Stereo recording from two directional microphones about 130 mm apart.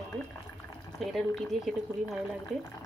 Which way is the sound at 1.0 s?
Centre (ahead or behind).